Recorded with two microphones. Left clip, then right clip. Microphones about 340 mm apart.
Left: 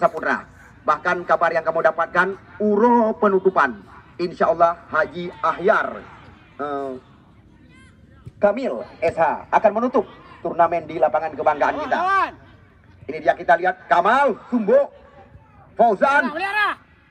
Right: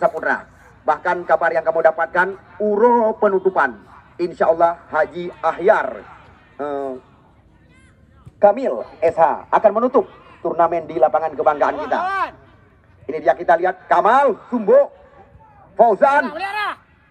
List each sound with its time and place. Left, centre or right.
0.0 s a man's voice: centre
8.4 s a man's voice: centre
12.0 s speech: right
13.0 s a man's voice: centre
16.3 s speech: right